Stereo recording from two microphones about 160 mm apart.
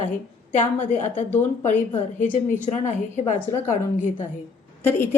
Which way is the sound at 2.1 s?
55° left (ahead or behind).